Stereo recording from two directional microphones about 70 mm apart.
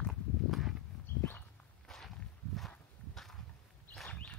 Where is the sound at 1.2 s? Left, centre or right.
Left.